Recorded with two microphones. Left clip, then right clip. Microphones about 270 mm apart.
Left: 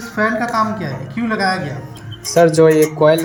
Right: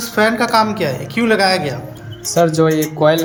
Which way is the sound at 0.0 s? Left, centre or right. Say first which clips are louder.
Right 3 dB; right.